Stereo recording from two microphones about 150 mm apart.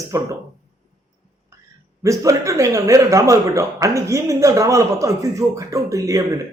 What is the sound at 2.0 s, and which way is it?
A man's voice, 20° right (ahead or behind).